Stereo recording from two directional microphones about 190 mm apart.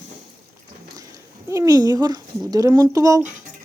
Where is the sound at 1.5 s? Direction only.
15° right (ahead or behind).